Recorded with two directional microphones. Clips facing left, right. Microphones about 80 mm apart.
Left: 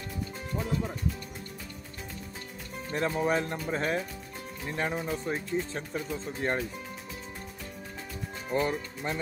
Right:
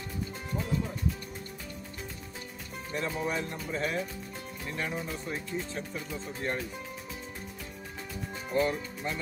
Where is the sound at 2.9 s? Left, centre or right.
Left.